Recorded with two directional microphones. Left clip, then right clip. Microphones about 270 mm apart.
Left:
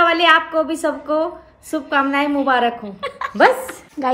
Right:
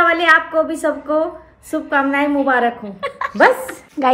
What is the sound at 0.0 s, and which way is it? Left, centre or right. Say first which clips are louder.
A woman's voice: right 1 dB; centre.